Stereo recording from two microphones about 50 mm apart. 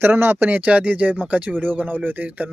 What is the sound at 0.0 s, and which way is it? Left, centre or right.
Speech, right.